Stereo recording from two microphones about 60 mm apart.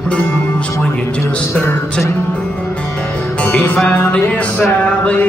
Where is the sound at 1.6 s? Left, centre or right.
Centre.